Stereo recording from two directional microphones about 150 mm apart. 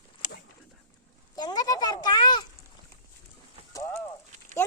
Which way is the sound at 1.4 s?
25° left (ahead or behind).